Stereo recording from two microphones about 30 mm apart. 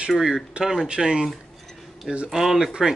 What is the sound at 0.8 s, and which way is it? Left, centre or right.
Speech, right.